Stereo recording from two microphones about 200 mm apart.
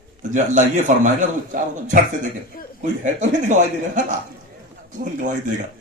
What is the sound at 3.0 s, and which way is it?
A man's voice, 35° right (ahead or behind).